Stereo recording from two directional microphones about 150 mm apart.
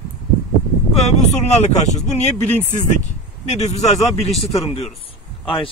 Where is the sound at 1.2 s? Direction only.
50° left (ahead or behind).